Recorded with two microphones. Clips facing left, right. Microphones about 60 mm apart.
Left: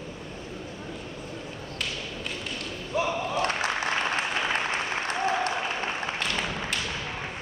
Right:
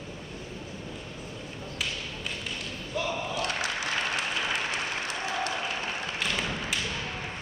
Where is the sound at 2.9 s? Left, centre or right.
Left.